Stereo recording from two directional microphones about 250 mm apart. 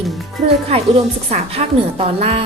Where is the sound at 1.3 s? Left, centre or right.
Right.